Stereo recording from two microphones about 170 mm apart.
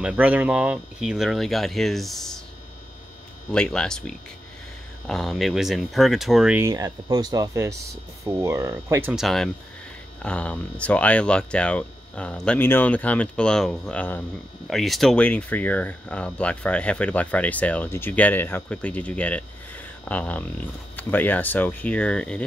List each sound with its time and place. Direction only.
0.0 s speech: 10° right (ahead or behind)
3.5 s speech: 5° left (ahead or behind)
6.6 s speech: 20° right (ahead or behind)
9.1 s speech: centre (ahead or behind)